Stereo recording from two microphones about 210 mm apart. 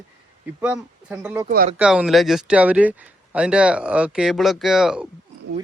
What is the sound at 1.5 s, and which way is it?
Speech, 40° right (ahead or behind).